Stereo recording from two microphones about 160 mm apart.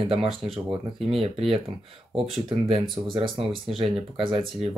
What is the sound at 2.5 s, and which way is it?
Speech, 35° right (ahead or behind).